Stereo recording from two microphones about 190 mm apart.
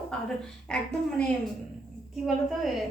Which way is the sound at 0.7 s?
5° left (ahead or behind).